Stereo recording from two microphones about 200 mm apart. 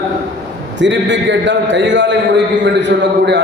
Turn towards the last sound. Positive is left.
turn(degrees=-60)  # may be behind; listen again after turning